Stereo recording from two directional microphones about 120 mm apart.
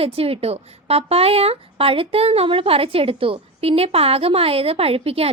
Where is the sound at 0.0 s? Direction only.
55° right (ahead or behind).